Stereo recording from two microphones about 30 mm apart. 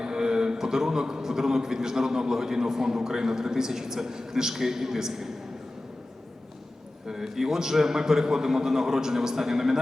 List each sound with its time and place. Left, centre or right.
0.0 s a man's voice: right
7.1 s a man's voice: centre